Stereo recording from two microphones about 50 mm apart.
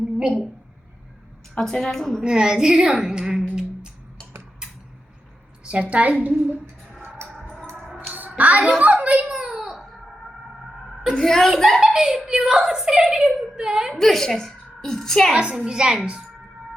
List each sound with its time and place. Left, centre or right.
0.2 s a woman's voice: centre
1.5 s a woman's voice: centre
2.2 s a woman's voice: centre
5.6 s a woman's voice: right
8.1 s a sound: right
8.8 s hands: right
9.4 s crying: centre
11.1 s a woman's voice: centre
11.8 s a woman's voice: centre
13.9 s a woman's voice: centre
15.3 s a woman's voice: right